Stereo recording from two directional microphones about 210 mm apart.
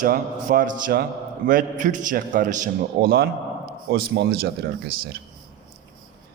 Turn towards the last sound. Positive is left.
turn(degrees=-50)  # may be behind; listen again after turning